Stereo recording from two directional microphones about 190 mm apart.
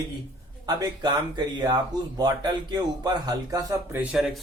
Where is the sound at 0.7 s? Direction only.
20° right (ahead or behind).